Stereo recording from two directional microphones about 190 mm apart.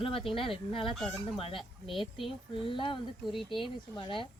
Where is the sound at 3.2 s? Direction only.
Centre (ahead or behind).